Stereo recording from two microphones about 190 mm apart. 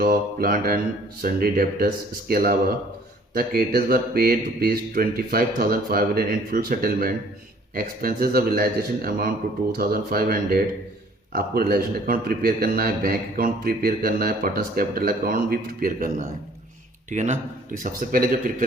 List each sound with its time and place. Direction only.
0.0 s a man's voice: 50° right (ahead or behind)